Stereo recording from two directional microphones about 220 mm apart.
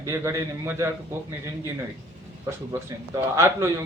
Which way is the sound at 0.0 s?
15° right (ahead or behind).